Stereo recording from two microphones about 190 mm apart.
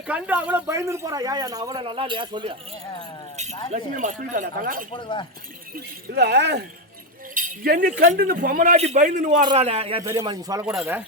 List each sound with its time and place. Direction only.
0.1 s a man's voice: 10° right (ahead or behind); by 2.6 s 25° right (ahead or behind)
3.7 s speech: 40° right (ahead or behind)
4.9 s speech: 25° left (ahead or behind)
5.7 s speech: 60° right (ahead or behind)
7.3 s speech: 50° right (ahead or behind)
9.5 s a man's voice: 30° right (ahead or behind)
10.0 s speech: 15° right (ahead or behind)
10.7 s speech: 5° right (ahead or behind)